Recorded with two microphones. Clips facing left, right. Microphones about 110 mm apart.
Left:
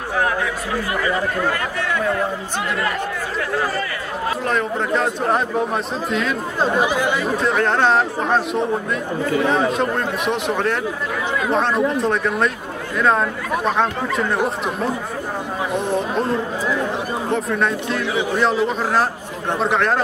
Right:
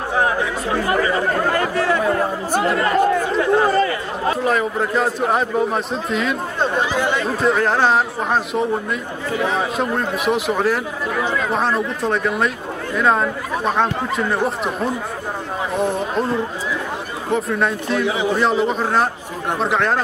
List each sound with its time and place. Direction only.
0.1 s speech: 25° right (ahead or behind)
4.5 s speech: 5° right (ahead or behind)